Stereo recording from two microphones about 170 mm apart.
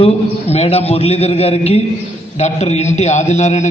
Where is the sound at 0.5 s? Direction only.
35° left (ahead or behind).